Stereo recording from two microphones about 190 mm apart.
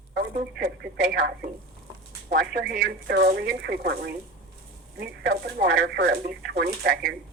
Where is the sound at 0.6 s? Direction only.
60° right (ahead or behind).